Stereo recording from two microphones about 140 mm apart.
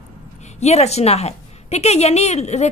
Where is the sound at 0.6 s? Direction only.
50° left (ahead or behind).